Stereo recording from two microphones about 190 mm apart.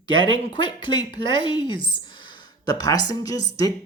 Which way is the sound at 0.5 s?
25° left (ahead or behind).